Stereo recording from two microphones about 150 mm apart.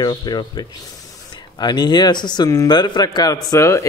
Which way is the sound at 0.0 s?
30° left (ahead or behind).